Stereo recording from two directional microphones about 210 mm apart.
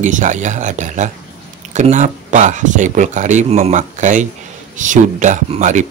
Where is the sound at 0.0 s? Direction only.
35° right (ahead or behind).